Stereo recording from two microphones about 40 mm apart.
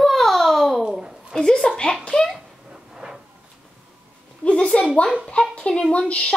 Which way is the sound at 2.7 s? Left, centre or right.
Centre.